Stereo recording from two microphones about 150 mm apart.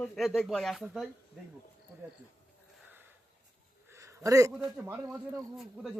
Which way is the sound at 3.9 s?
20° right (ahead or behind).